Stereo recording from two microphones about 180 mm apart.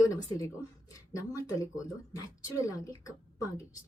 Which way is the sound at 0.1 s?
20° left (ahead or behind).